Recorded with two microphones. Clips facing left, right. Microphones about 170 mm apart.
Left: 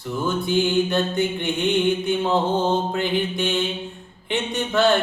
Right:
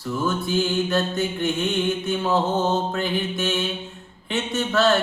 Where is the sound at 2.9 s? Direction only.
15° left (ahead or behind).